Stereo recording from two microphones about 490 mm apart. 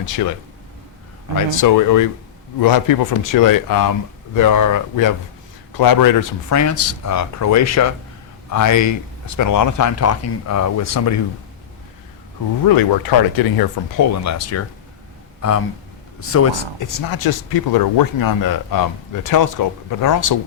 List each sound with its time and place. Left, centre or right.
1.5 s speech: left
12.6 s speech: left
17.0 s speech: left